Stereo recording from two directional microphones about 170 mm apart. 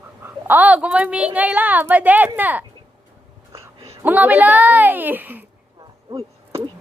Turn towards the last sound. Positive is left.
turn(degrees=-25)  # may be behind; listen again after turning